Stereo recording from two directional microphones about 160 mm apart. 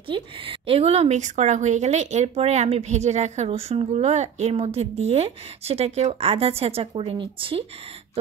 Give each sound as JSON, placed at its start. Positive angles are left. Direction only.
{"t": 0.1, "sound": "speech", "side_deg": -35}